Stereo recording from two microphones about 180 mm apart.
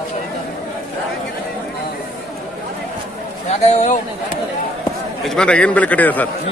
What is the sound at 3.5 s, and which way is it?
Speech, 40° left (ahead or behind).